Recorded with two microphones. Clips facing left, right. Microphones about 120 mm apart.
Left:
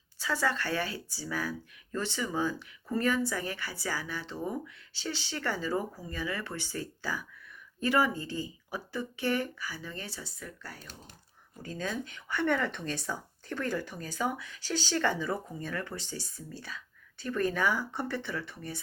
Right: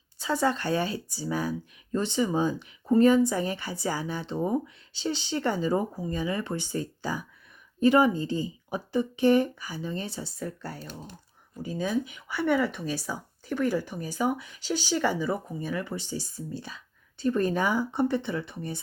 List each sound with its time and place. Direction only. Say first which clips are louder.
0.2 s speech: right 5 dB; 20° right (ahead or behind)
11.6 s speech: right 7 dB; 15° right (ahead or behind)